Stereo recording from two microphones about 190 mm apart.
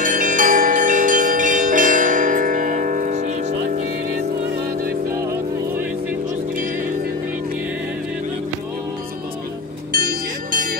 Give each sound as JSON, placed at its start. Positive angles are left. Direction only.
{"t": 0.0, "sound": "bell", "side_deg": -45}
{"t": 9.9, "sound": "music", "side_deg": -45}